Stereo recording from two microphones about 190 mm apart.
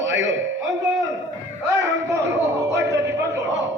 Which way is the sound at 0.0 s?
75° right (ahead or behind).